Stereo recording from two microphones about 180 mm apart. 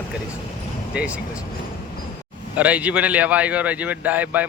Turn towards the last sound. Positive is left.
turn(degrees=-10)  # may be behind; listen again after turning